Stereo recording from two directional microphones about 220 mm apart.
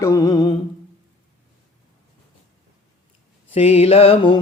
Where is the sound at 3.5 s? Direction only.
30° left (ahead or behind).